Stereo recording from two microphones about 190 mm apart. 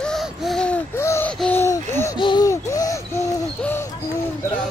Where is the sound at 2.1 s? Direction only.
25° left (ahead or behind).